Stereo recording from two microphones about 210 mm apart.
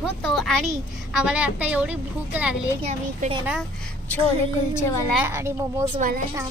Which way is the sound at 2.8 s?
25° right (ahead or behind).